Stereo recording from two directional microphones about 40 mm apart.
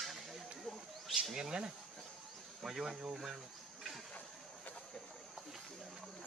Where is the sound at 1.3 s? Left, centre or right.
Centre.